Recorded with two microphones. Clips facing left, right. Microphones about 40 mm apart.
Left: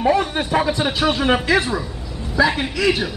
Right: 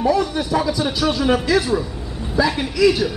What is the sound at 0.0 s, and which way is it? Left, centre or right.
A man's voice, left.